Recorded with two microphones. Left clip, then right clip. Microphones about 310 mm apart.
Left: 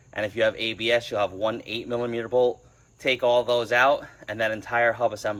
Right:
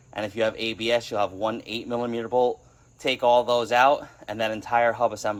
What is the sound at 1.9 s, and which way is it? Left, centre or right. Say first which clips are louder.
A man's voice: even; centre.